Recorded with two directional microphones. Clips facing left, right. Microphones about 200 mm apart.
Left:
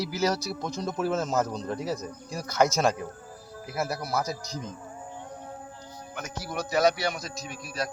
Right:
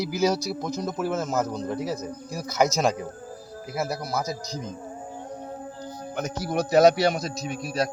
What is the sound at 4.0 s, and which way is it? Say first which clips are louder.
Speech: right 1 dB; 10° left (ahead or behind).